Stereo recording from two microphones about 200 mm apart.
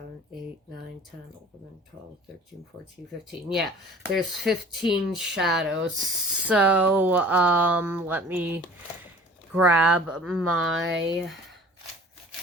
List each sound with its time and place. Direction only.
4.1 s speech: centre (ahead or behind)
10.8 s speech: 60° right (ahead or behind)